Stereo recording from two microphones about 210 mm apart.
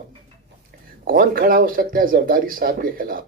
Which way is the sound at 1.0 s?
45° right (ahead or behind).